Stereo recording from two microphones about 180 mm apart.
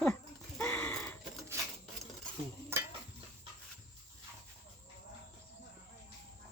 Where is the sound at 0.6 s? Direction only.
10° left (ahead or behind).